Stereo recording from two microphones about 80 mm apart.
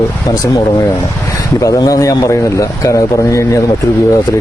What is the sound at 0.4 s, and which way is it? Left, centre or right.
Speech, left.